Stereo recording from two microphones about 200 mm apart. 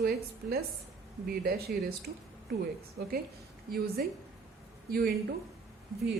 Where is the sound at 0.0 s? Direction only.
50° right (ahead or behind).